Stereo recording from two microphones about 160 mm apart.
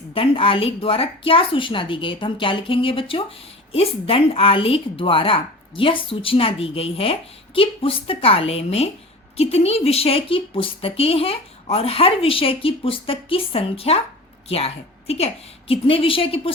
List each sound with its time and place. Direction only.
0.1 s a woman's voice: 35° left (ahead or behind)